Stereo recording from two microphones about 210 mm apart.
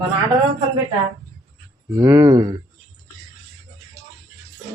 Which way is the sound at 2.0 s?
10° right (ahead or behind).